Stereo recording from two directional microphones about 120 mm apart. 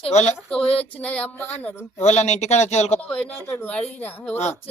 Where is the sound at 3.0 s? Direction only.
10° left (ahead or behind).